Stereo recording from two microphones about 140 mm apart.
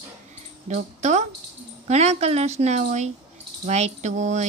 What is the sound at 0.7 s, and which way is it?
Speech, 55° right (ahead or behind).